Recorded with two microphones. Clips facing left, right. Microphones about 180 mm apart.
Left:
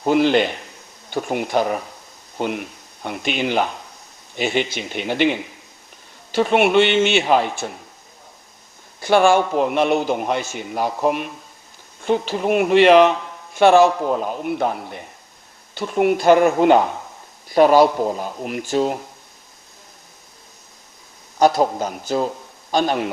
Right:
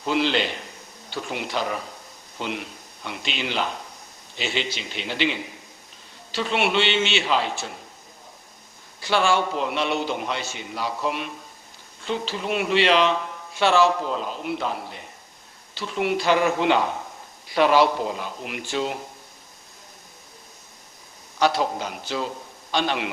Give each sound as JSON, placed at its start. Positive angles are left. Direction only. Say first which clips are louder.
{"t": 0.0, "sound": "speech", "louder": "left 7 dB", "side_deg": 50}
{"t": 9.0, "sound": "speech", "louder": "left 7 dB", "side_deg": 50}
{"t": 21.3, "sound": "speech", "louder": "left 6 dB", "side_deg": 45}